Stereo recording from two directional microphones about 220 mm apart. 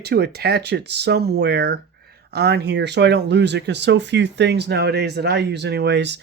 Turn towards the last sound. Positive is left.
turn(degrees=-50)  # may be behind; listen again after turning